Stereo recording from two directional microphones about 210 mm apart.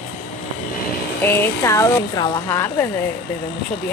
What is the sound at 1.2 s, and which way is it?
Speech, 10° left (ahead or behind).